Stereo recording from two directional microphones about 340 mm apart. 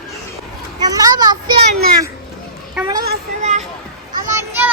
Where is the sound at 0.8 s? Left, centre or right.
Centre.